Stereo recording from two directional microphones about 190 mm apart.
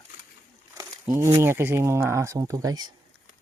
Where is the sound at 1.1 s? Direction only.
15° right (ahead or behind).